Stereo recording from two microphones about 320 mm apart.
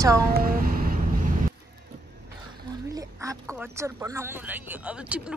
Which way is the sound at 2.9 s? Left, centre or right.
Centre.